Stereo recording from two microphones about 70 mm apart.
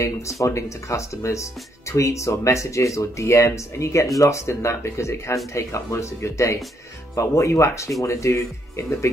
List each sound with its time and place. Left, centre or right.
0.0 s speech: left